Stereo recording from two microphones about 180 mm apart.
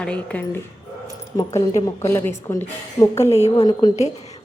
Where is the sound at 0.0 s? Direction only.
5° left (ahead or behind).